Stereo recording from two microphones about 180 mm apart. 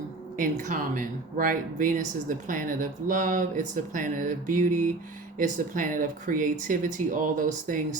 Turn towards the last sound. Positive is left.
turn(degrees=-45)  # may be behind; listen again after turning